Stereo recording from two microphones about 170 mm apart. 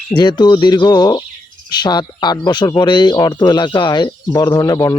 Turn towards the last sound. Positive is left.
turn(degrees=20)  # may be behind; listen again after turning